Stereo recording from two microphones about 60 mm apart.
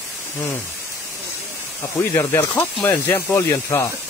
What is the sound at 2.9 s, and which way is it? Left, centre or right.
Speech, left.